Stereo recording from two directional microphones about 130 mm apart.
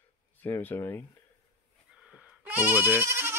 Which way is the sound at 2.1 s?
10° right (ahead or behind).